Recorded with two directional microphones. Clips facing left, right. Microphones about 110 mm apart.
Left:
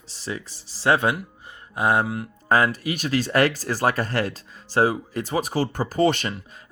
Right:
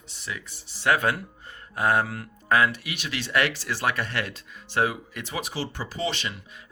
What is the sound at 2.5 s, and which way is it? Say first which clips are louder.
Speech: left 3 dB; 40° left (ahead or behind).